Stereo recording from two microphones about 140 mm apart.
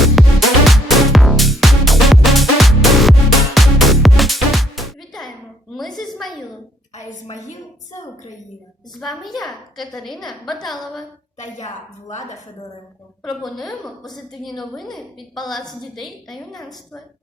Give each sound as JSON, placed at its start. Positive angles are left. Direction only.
{"t": 0.0, "sound": "music", "side_deg": 0}
{"t": 5.7, "sound": "a sound", "side_deg": 0}
{"t": 6.9, "sound": "a woman's voice", "side_deg": 55}
{"t": 9.0, "sound": "a woman's voice", "side_deg": 0}
{"t": 11.3, "sound": "a woman's voice", "side_deg": 60}
{"t": 13.2, "sound": "a woman's voice", "side_deg": 0}